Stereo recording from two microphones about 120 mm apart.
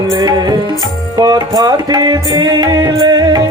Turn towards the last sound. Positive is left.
turn(degrees=-30)  # may be behind; listen again after turning